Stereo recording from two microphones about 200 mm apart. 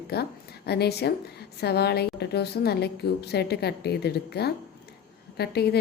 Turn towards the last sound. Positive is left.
turn(degrees=55)  # may be behind; listen again after turning